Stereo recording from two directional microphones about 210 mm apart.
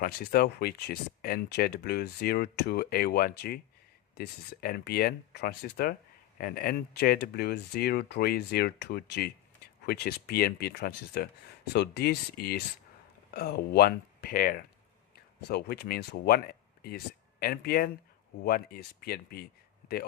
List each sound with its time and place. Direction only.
0.0 s speech: 45° left (ahead or behind)
17.4 s speech: 45° left (ahead or behind)